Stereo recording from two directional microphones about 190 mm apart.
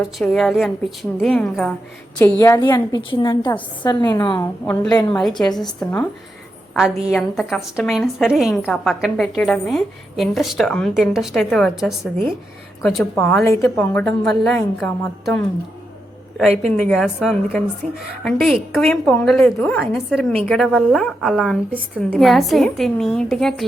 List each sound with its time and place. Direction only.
0.2 s a woman's voice: centre (ahead or behind); by 4.4 s 20° left (ahead or behind)
4.6 s a woman's voice: 5° left (ahead or behind)
7.1 s a woman's voice: centre (ahead or behind)
16.5 s a woman's voice: 5° left (ahead or behind)